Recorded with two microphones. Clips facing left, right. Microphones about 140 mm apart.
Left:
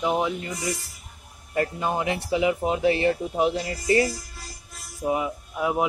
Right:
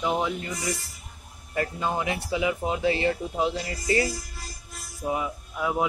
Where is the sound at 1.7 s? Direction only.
25° left (ahead or behind).